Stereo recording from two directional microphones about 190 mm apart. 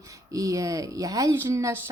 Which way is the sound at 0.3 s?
15° right (ahead or behind).